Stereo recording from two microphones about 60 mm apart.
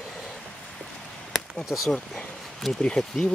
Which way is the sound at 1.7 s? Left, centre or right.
Centre.